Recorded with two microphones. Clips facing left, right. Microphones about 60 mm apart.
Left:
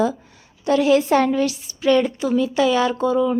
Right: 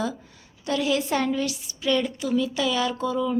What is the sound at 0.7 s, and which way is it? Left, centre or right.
A woman's voice, left.